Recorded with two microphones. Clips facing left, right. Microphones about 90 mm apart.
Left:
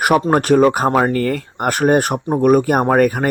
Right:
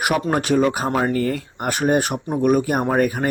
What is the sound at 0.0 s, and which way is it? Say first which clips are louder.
Speech: left 6 dB; 45° left (ahead or behind).